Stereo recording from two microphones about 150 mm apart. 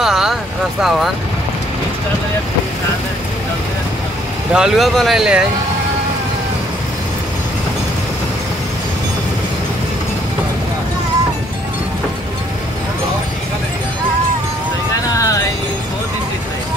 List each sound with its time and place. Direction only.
0.0 s vehicle: centre (ahead or behind)
0.8 s speech: centre (ahead or behind)
4.6 s speech: centre (ahead or behind)
15.1 s music: 20° left (ahead or behind)